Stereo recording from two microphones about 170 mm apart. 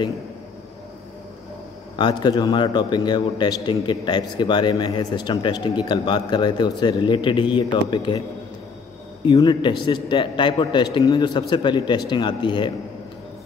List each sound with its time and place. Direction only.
2.0 s a man's voice: 25° left (ahead or behind)
9.2 s a man's voice: 25° left (ahead or behind)